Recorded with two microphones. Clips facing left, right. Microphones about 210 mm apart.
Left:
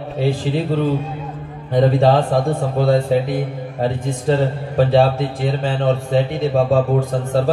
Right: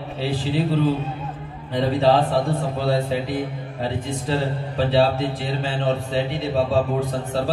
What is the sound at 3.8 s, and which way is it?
A man's voice, 45° left (ahead or behind).